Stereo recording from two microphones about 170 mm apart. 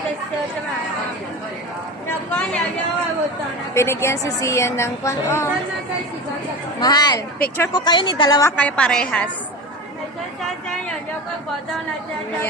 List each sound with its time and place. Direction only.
2.0 s a woman's voice: 5° left (ahead or behind)
3.8 s a woman's voice: 15° left (ahead or behind)
6.7 s a woman's voice: 25° left (ahead or behind); by 9.3 s 5° left (ahead or behind)